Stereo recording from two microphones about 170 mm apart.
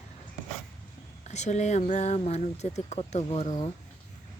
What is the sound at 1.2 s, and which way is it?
Speech, 40° left (ahead or behind).